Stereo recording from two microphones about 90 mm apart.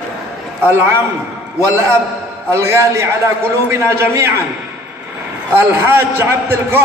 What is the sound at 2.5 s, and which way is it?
A man's voice, 30° right (ahead or behind).